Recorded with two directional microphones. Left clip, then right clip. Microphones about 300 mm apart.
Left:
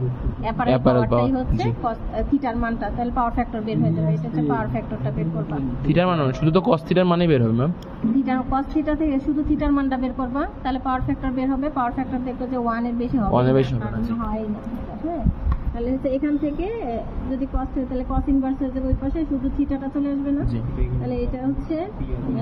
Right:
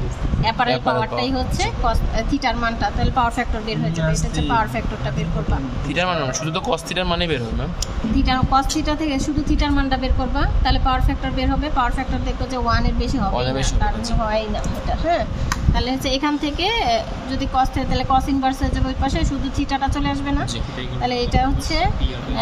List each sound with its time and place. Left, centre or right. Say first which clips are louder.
0.4 s speech: right 5 dB; centre
0.7 s a man's voice: left 1 dB; centre
1.2 s a woman's voice: right 1 dB; centre
5.9 s a man's voice: even; centre
8.3 s a woman's voice: right 5 dB; centre
13.3 s a man's voice: left 6 dB; centre
16.2 s a woman's voice: right 3 dB; centre
17.9 s a woman's voice: right 6 dB; centre